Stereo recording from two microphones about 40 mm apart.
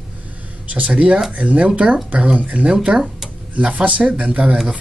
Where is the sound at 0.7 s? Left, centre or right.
Right.